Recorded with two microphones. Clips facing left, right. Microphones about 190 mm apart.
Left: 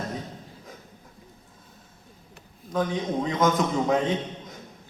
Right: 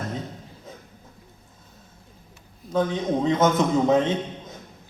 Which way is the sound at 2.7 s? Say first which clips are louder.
Right 3 dB; 25° right (ahead or behind).